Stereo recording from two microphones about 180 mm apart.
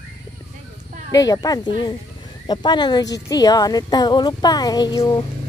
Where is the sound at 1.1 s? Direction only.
20° left (ahead or behind).